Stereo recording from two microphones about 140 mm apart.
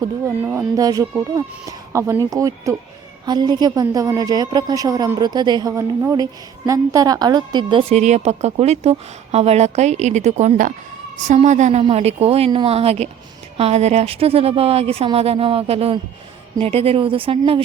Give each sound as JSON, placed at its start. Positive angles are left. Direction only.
{"t": 0.0, "sound": "a woman's voice", "side_deg": -15}
{"t": 11.8, "sound": "a woman's voice", "side_deg": -45}